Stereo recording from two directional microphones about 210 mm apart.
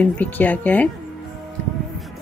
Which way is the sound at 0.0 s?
10° left (ahead or behind).